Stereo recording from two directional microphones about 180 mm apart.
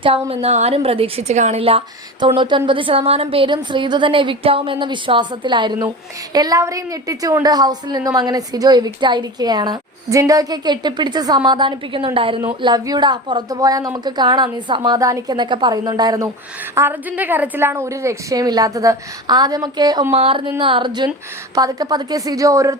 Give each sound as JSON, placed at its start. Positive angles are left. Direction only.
{"t": 0.0, "sound": "a woman's voice", "side_deg": -30}